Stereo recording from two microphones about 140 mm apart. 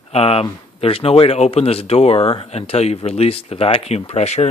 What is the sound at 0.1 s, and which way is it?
Speech, 45° left (ahead or behind).